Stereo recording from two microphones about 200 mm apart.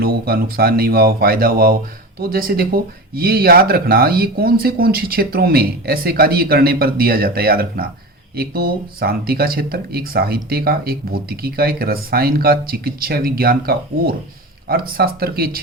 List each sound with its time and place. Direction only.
0.0 s speech: 50° right (ahead or behind)